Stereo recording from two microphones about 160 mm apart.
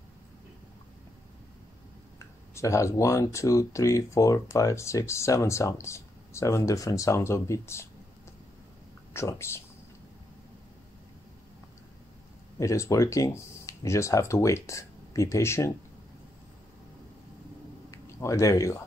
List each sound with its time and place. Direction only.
2.1 s speech: 20° left (ahead or behind)
9.1 s speech: 15° left (ahead or behind)
12.5 s speech: 20° left (ahead or behind)
17.9 s speech: 20° left (ahead or behind)